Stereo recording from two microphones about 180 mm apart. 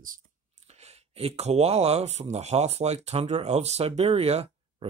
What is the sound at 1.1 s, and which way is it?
Speech, 35° right (ahead or behind).